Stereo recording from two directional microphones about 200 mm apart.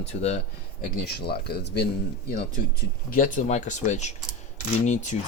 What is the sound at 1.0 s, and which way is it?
Speech, 55° left (ahead or behind).